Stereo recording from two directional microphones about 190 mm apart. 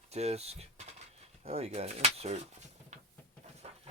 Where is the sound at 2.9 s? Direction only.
35° right (ahead or behind).